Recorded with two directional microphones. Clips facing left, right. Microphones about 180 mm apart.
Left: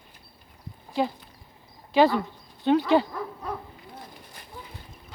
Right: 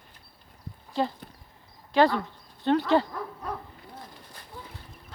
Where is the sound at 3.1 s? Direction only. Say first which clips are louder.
Left 2 dB; 5° left (ahead or behind).